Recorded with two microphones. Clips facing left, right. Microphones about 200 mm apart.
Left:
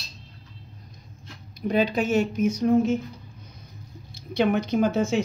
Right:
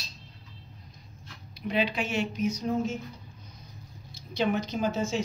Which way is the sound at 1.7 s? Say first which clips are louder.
Left 6 dB; 45° left (ahead or behind).